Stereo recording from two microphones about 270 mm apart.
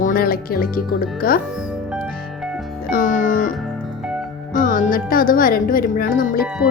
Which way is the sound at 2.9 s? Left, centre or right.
Left.